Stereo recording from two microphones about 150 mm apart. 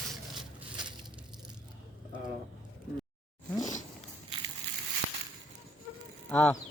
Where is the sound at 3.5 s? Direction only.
25° left (ahead or behind).